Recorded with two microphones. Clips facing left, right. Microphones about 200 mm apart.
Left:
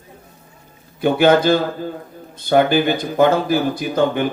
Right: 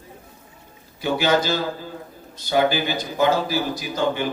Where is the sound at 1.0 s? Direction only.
55° left (ahead or behind).